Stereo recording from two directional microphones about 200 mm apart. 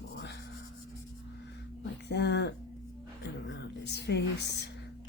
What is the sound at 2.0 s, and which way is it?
Speech, 55° left (ahead or behind).